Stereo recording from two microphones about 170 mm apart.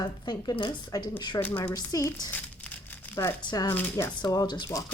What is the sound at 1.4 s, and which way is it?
Speech, 10° left (ahead or behind).